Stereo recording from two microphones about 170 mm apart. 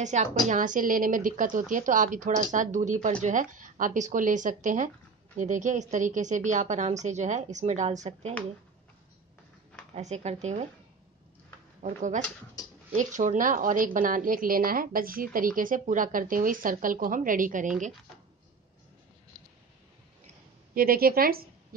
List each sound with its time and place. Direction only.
0.0 s a woman's voice: 45° right (ahead or behind)
9.9 s speech: 40° right (ahead or behind)
11.8 s a woman's voice: 45° right (ahead or behind)
20.7 s a woman's voice: 60° right (ahead or behind)